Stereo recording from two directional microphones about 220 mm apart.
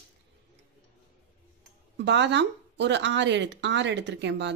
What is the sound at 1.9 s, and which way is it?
Speech, 50° right (ahead or behind).